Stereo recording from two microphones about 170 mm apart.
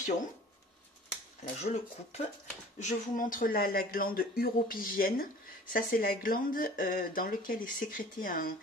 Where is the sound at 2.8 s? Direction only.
50° left (ahead or behind).